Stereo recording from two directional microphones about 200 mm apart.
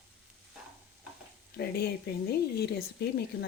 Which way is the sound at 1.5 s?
55° left (ahead or behind).